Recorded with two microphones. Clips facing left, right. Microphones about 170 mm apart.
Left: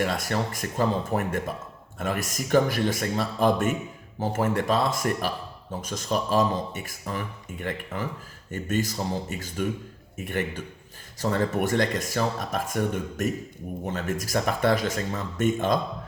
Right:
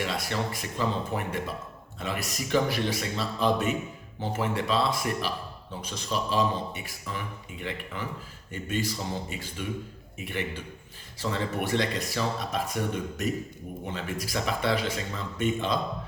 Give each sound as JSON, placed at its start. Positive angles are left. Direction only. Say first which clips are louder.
{"t": 0.0, "sound": "speech", "louder": "left 4 dB", "side_deg": 45}